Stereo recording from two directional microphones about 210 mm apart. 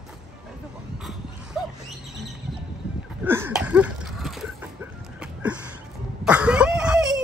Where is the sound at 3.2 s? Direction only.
10° right (ahead or behind).